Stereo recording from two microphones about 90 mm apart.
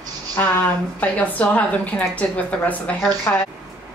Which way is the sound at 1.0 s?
15° left (ahead or behind).